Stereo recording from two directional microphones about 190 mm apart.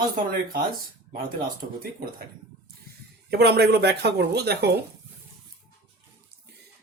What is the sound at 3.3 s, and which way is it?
A woman's voice, 60° right (ahead or behind).